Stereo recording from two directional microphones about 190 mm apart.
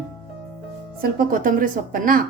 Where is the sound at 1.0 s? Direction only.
45° right (ahead or behind).